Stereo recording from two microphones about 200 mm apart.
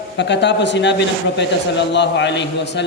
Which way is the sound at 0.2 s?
60° left (ahead or behind).